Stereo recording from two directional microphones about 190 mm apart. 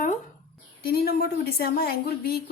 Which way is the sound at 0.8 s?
55° left (ahead or behind).